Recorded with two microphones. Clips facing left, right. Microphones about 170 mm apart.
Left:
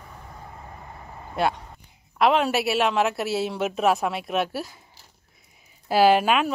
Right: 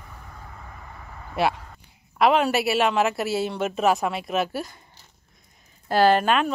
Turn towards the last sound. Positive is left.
turn(degrees=5)  # may be behind; listen again after turning